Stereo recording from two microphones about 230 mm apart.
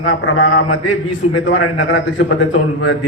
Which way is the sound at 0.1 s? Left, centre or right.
Left.